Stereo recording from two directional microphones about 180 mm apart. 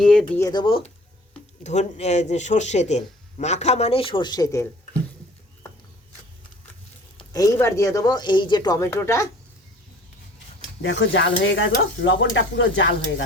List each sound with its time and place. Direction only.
0.0 s a sound: 5° left (ahead or behind)
0.3 s speech: 20° left (ahead or behind)
1.6 s speech: 40° left (ahead or behind); by 4.7 s 15° left (ahead or behind)
7.2 s speech: 20° left (ahead or behind)
10.8 s sizzle: 90° left